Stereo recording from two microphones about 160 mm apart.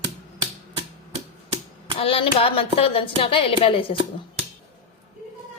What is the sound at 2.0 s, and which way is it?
Speech, 35° left (ahead or behind).